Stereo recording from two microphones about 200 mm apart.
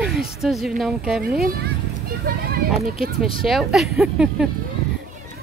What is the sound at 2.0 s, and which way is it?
Vehicle, 45° right (ahead or behind).